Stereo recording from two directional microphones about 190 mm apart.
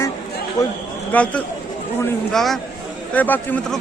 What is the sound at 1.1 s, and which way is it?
Speech, 5° left (ahead or behind).